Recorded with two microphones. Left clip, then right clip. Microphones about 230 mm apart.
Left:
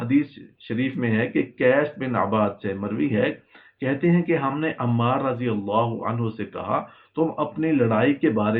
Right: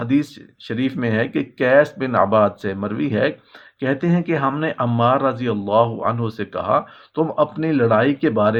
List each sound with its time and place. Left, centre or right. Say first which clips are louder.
0.0 s speech: right 2 dB; right